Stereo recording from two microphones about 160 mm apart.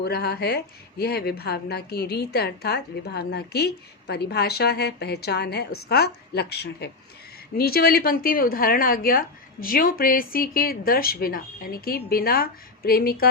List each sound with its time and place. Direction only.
0.0 s speech: 90° left
7.5 s a woman's voice: 75° left (ahead or behind)